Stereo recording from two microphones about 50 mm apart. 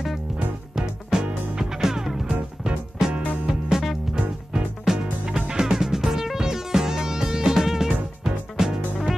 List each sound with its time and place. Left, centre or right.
0.4 s music: centre
2.6 s music: centre
4.8 s music: centre